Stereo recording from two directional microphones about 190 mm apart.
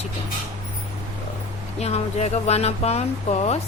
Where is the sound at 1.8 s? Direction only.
35° left (ahead or behind).